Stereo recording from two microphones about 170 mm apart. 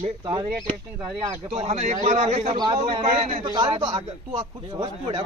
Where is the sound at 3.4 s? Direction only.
25° right (ahead or behind).